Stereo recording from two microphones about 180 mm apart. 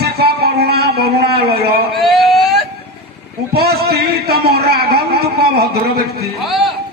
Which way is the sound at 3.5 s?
60° right (ahead or behind).